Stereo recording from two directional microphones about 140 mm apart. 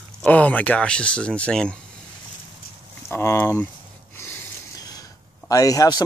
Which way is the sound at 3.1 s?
15° left (ahead or behind).